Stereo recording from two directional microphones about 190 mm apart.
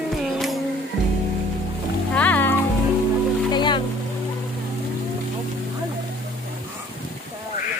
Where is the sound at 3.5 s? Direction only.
25° left (ahead or behind).